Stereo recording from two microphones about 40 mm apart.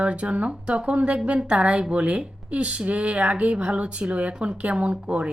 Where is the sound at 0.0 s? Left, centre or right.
Right.